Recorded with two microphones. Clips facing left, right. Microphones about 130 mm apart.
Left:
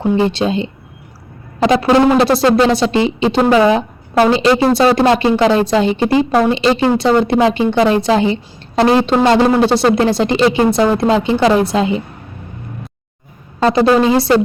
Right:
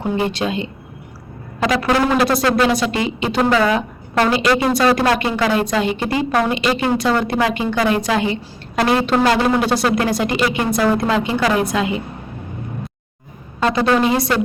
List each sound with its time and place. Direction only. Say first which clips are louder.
0.0 s speech: left 5 dB; 30° left (ahead or behind)
13.6 s a woman's voice: left 5 dB; 35° left (ahead or behind)